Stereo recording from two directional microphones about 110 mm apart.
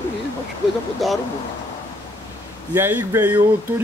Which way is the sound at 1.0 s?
Centre (ahead or behind).